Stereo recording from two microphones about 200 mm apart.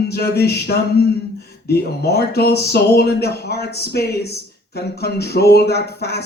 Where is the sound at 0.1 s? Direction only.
55° left (ahead or behind).